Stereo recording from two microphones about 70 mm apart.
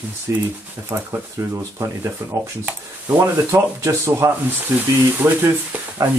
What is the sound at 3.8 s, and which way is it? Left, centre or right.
Speech, right.